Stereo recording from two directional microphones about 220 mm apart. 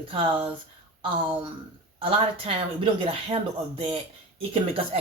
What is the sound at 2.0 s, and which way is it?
Speech, 25° right (ahead or behind).